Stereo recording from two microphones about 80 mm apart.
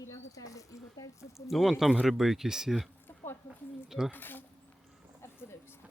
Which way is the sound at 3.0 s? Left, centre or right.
Left.